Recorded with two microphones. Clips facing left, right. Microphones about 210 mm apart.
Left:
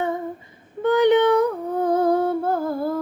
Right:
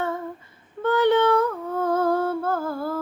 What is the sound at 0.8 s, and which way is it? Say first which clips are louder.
Female singing: left 3 dB; 15° left (ahead or behind).